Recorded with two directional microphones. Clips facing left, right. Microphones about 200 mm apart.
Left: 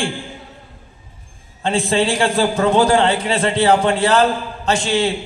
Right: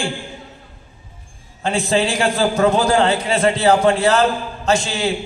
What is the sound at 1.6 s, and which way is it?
A man's voice, 30° left (ahead or behind).